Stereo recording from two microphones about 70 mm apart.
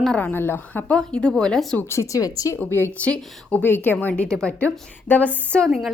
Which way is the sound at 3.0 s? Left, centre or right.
Centre.